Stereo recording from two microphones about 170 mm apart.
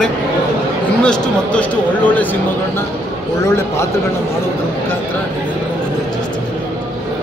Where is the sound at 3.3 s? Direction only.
15° left (ahead or behind).